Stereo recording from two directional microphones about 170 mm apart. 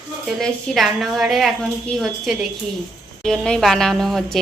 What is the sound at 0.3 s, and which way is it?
A woman's voice, centre (ahead or behind).